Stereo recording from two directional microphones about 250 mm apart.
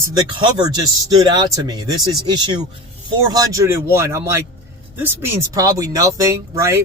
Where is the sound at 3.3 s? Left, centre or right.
Centre.